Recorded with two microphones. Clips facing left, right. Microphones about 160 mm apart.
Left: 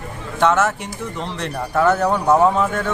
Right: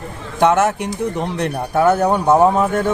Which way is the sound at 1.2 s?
55° right (ahead or behind).